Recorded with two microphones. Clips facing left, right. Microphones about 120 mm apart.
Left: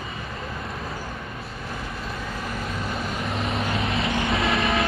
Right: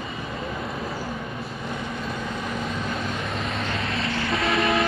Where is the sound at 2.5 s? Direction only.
Centre (ahead or behind).